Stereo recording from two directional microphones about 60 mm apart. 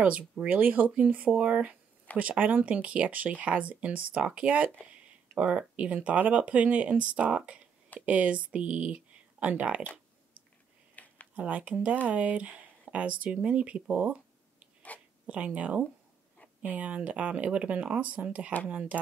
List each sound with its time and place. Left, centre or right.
0.5 s speech: right
11.0 s a sound: left
11.3 s speech: right
14.9 s speech: left
15.2 s speech: right